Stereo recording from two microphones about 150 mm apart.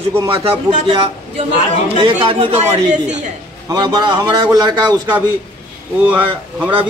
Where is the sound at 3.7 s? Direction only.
30° right (ahead or behind).